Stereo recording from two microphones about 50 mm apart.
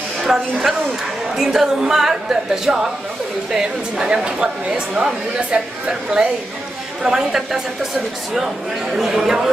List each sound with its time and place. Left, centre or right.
0.2 s a woman's voice: centre
8.9 s a woman's voice: centre